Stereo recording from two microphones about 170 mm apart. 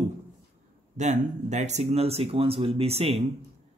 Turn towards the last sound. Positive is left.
turn(degrees=-35)  # may be behind; listen again after turning